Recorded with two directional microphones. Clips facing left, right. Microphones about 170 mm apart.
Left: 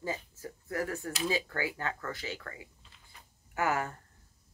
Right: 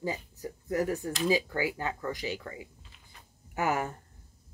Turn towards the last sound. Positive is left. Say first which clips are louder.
# right 1 dB
turn(degrees=-20)  # may be behind; listen again after turning